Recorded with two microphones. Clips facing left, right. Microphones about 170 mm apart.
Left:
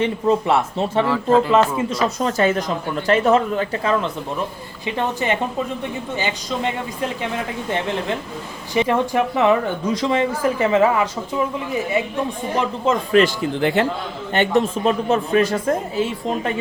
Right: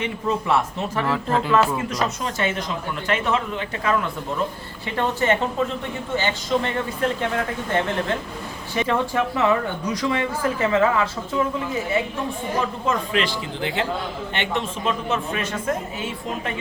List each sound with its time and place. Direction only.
0.0 s speech: 30° left (ahead or behind)
1.0 s speech: centre (ahead or behind)
1.9 s speech: 30° left (ahead or behind)
4.9 s speech: 15° left (ahead or behind)
8.7 s speech: 20° left (ahead or behind)
13.1 s speech: 50° left (ahead or behind)
14.3 s speech: 40° left (ahead or behind)